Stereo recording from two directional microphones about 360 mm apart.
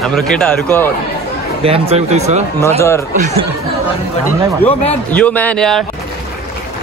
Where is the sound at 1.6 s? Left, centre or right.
Centre.